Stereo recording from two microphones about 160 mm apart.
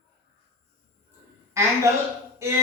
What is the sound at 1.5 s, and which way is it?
Speech, 20° right (ahead or behind).